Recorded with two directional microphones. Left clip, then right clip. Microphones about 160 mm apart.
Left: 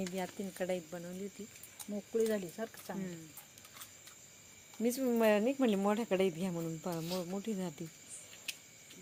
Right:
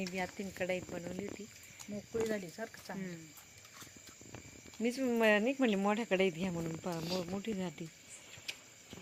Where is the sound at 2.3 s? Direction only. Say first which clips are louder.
Left 2 dB; 55° left (ahead or behind).